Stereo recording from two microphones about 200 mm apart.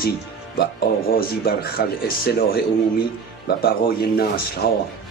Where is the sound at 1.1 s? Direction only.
50° left (ahead or behind).